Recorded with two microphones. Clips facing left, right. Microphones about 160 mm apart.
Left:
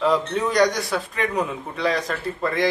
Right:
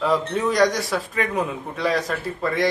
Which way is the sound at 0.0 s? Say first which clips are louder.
Even; centre (ahead or behind).